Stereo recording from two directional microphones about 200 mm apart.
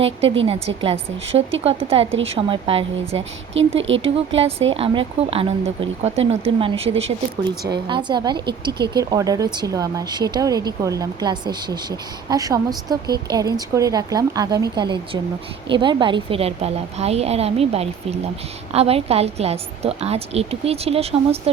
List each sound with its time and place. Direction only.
0.0 s a woman's voice: 30° right (ahead or behind)
3.8 s speech: 70° right (ahead or behind)
4.0 s a woman's voice: 30° right (ahead or behind)